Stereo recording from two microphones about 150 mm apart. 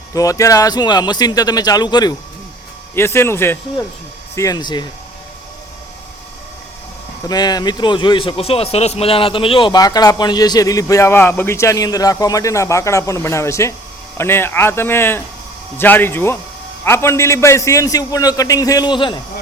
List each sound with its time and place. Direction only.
0.1 s a man's voice: 25° left (ahead or behind)
2.9 s speech: 15° left (ahead or behind)
4.4 s a man's voice: 25° left (ahead or behind)
7.3 s a man's voice: 25° left (ahead or behind)